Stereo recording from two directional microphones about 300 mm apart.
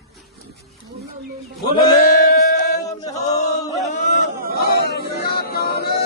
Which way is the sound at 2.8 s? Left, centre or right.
Centre.